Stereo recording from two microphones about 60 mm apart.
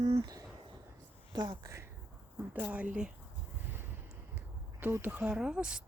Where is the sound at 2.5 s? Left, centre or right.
Right.